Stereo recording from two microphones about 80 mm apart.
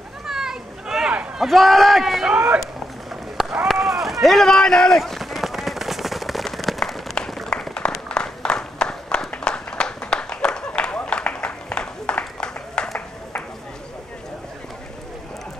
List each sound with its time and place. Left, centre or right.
0.3 s children playing: centre
1.5 s speech: centre
2.2 s speech: centre
3.6 s run: centre
9.3 s a sound: centre